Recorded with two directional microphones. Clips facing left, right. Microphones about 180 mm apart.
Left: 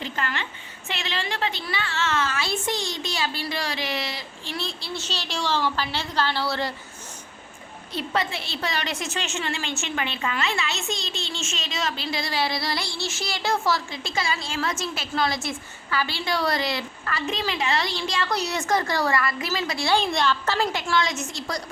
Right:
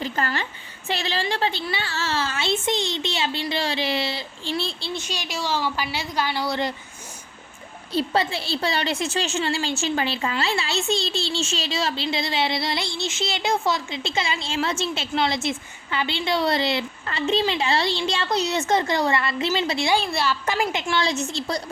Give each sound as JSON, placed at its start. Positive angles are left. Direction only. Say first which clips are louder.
{"t": 0.0, "sound": "a woman's voice", "louder": "right 4 dB", "side_deg": -40}
{"t": 4.9, "sound": "a woman's voice", "louder": "right 1 dB", "side_deg": -15}
{"t": 7.9, "sound": "a woman's voice", "louder": "right 4 dB", "side_deg": -30}
{"t": 19.9, "sound": "a woman's voice", "louder": "left 4 dB", "side_deg": -5}
{"t": 20.9, "sound": "a woman's voice", "louder": "right 1 dB", "side_deg": -30}